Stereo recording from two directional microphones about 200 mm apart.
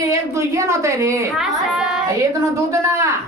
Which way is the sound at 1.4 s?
Centre (ahead or behind).